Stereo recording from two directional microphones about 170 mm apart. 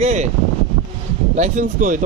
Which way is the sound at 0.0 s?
45° right (ahead or behind).